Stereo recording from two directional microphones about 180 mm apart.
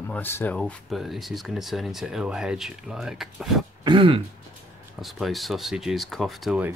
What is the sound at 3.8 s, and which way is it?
Throat clearing, 25° right (ahead or behind).